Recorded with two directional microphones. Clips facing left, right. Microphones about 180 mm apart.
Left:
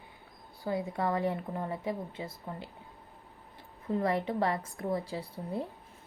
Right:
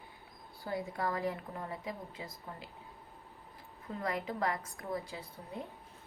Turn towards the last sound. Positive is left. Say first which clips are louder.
# left 8 dB
turn(degrees=35)  # may be behind; listen again after turning